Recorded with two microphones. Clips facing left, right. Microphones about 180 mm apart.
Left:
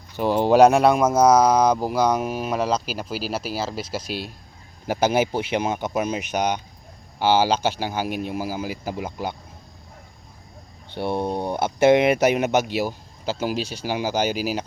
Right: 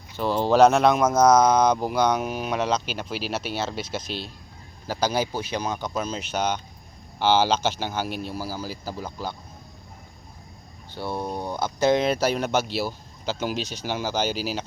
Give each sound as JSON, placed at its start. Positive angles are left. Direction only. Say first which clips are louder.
{"t": 0.2, "sound": "speech", "louder": "left 3 dB", "side_deg": 15}
{"t": 4.9, "sound": "speech", "louder": "left 5 dB", "side_deg": 25}
{"t": 10.9, "sound": "speech", "louder": "left 5 dB", "side_deg": 25}